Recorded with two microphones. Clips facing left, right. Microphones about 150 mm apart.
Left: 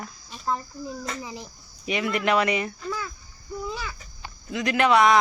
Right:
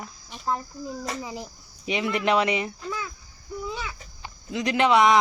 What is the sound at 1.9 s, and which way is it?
Speech, 25° right (ahead or behind).